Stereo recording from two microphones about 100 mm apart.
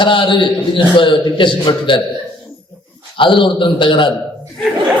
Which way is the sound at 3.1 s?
55° left (ahead or behind).